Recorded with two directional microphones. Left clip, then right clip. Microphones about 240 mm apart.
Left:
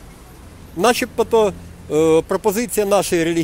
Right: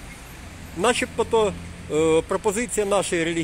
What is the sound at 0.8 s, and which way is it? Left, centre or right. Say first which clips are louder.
Speech: left 5 dB; left.